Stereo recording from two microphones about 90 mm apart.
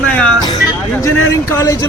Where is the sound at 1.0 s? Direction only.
35° left (ahead or behind).